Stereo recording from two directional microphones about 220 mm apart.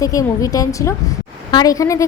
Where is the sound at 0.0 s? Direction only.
15° left (ahead or behind).